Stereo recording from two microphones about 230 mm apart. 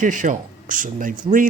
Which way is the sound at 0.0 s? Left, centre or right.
Right.